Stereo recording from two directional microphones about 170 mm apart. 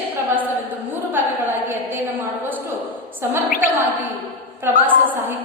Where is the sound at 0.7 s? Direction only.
10° right (ahead or behind).